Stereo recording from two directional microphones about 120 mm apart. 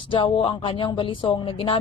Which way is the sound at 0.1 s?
45° left (ahead or behind).